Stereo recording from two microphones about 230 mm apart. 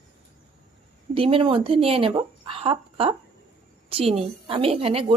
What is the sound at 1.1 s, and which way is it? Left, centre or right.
A woman's voice, right.